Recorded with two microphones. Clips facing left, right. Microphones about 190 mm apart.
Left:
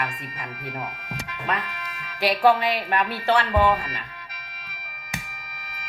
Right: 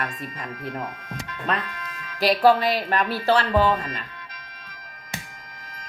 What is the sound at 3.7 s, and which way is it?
Speech, 10° left (ahead or behind).